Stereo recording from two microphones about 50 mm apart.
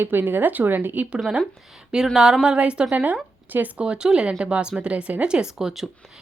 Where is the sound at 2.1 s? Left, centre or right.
Centre; by 3.2 s right.